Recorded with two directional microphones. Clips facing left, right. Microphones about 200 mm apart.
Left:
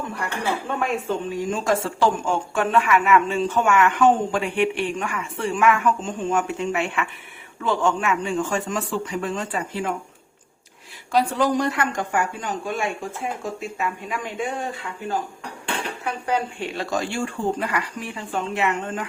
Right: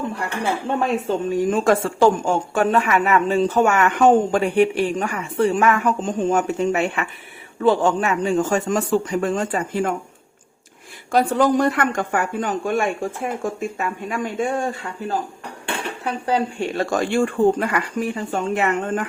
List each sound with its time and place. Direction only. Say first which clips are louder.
0.8 s speech: right 4 dB; 35° right (ahead or behind)
1.3 s a woman's voice: right 7 dB; 50° right (ahead or behind)
11.1 s a woman's voice: right 3 dB; 50° right (ahead or behind)
16.0 s a woman's voice: right 4 dB; 35° right (ahead or behind); by 19.0 s 50° right (ahead or behind)